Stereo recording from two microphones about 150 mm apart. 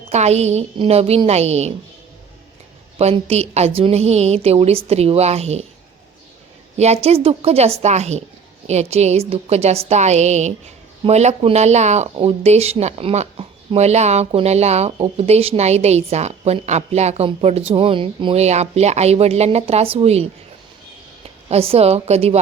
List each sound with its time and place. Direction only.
0.1 s speech: 50° right (ahead or behind)
3.0 s speech: 45° right (ahead or behind)
6.7 s speech: 45° right (ahead or behind)
21.5 s speech: 40° right (ahead or behind)